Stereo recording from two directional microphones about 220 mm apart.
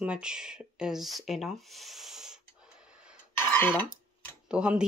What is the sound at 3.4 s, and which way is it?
Cough, 10° left (ahead or behind).